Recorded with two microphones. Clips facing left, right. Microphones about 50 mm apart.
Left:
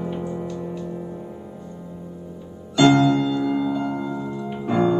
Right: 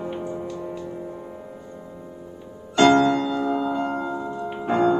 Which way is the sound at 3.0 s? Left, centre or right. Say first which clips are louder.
Left 2 dB; right.